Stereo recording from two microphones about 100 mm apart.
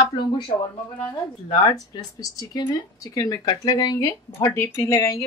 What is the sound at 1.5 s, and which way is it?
Speech, 45° left (ahead or behind).